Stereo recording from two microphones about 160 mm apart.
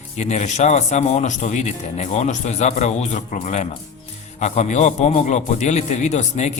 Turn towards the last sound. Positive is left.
turn(degrees=45)  # may be behind; listen again after turning